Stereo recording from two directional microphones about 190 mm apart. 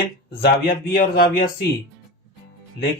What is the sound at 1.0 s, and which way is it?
Speech, 50° left (ahead or behind).